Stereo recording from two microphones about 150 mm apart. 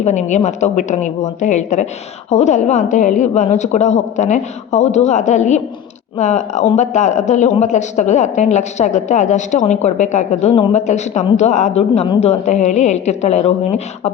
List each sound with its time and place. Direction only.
0.0 s a woman's voice: 55° left (ahead or behind)